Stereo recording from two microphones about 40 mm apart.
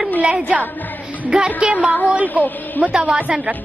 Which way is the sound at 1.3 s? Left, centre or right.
Right.